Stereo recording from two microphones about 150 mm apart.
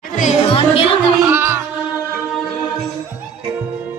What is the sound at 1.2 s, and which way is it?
Music, 15° right (ahead or behind).